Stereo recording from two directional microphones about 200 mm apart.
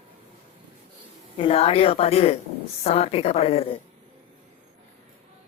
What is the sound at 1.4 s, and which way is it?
A woman's voice, 30° left (ahead or behind).